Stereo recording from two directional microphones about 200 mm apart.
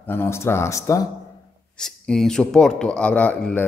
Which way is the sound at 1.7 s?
5° left (ahead or behind).